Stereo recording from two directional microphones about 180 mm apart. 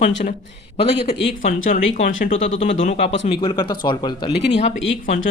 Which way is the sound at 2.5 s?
90° left.